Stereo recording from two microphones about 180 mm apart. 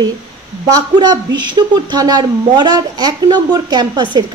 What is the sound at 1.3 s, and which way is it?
A child's voice, 25° right (ahead or behind).